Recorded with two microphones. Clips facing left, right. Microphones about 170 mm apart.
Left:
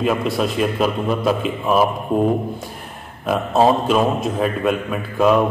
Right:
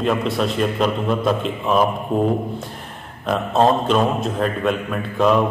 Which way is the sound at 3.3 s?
5° left (ahead or behind).